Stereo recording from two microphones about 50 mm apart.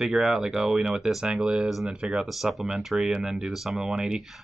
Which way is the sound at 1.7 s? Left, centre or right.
Centre.